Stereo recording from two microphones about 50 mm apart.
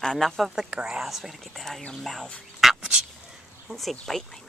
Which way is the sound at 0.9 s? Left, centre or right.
Centre.